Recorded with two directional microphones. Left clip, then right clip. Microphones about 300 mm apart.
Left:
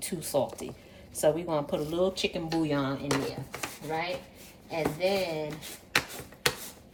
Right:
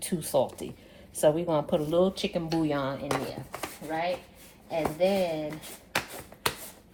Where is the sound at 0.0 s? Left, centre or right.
Right.